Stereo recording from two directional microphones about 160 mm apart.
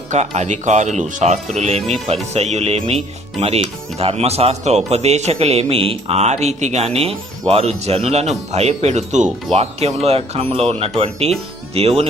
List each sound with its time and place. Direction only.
0.1 s speech: 45° right (ahead or behind)